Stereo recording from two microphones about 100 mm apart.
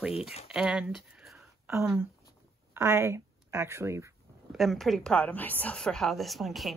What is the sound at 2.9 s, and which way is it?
Speech, 25° right (ahead or behind).